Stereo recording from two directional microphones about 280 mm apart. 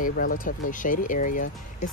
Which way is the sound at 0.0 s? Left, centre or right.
Left.